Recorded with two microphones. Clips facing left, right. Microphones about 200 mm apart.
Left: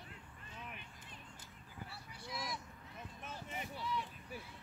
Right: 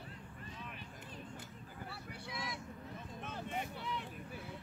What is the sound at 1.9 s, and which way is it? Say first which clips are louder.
Boat: even; 60° right (ahead or behind).